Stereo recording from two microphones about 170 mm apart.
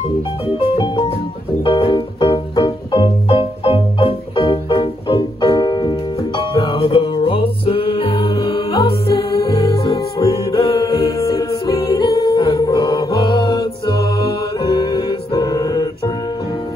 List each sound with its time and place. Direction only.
0.6 s music: 30° left (ahead or behind)
10.1 s music: 20° left (ahead or behind)